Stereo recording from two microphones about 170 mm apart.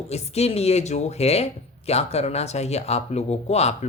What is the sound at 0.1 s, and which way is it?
Speech, 40° left (ahead or behind).